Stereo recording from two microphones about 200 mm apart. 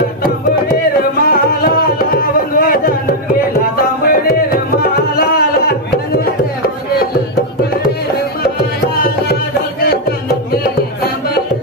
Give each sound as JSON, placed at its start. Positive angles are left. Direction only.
{"t": 1.2, "sound": "music", "side_deg": 45}
{"t": 9.0, "sound": "music", "side_deg": 50}